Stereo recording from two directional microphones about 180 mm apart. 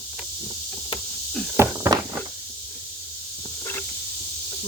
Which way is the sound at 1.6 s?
15° right (ahead or behind).